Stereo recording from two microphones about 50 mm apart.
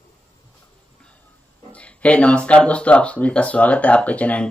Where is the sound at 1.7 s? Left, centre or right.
Left.